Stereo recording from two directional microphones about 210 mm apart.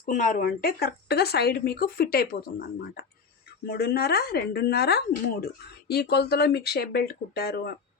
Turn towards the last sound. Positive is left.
turn(degrees=50)  # may be behind; listen again after turning